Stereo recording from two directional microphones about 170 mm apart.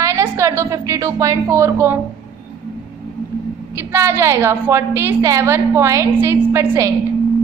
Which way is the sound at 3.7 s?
15° right (ahead or behind).